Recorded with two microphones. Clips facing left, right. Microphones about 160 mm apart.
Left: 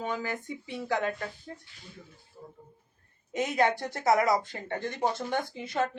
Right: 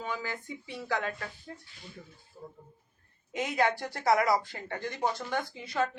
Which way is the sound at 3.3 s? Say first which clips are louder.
Left 2 dB; 20° left (ahead or behind).